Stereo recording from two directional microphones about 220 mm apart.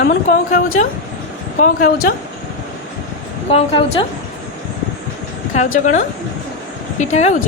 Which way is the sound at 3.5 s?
25° left (ahead or behind).